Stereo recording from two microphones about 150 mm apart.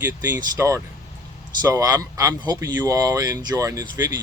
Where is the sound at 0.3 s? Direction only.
20° right (ahead or behind).